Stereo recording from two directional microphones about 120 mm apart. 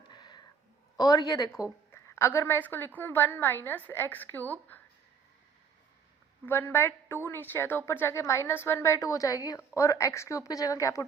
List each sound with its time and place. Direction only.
0.1 s a sound: 35° left (ahead or behind)
0.9 s a woman's voice: 30° left (ahead or behind); by 4.5 s 15° left (ahead or behind)
6.4 s a woman's voice: 15° left (ahead or behind)